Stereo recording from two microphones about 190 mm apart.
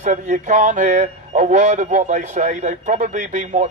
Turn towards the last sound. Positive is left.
turn(degrees=-40)  # may be behind; listen again after turning